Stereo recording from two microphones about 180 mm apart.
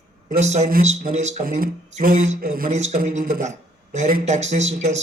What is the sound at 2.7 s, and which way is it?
A man's voice, 40° right (ahead or behind).